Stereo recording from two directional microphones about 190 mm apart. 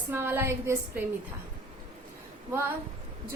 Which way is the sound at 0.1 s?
10° right (ahead or behind).